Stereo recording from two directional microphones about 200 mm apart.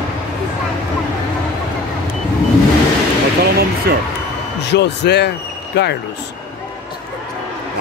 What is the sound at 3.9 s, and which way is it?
Speech, 50° right (ahead or behind).